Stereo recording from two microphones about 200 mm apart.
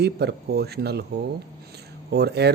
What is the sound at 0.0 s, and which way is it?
Speech, 55° right (ahead or behind).